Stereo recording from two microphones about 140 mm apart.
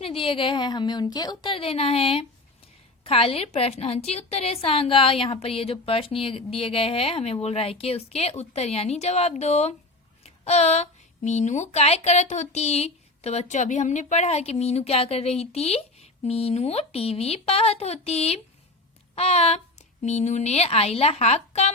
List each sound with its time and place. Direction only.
0.0 s a woman's voice: 40° left (ahead or behind)